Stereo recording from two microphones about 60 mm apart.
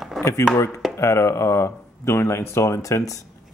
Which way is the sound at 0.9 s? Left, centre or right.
Left.